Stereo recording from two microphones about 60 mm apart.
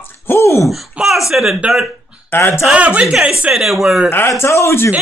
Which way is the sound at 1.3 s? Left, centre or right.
Centre.